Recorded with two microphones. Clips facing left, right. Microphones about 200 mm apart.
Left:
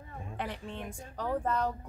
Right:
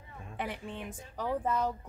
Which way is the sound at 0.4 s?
5° right (ahead or behind).